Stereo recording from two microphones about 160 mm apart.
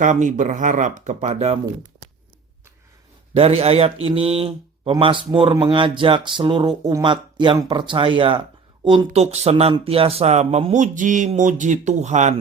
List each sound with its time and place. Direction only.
0.0 s speech: 50° right (ahead or behind)
3.3 s speech: 40° right (ahead or behind)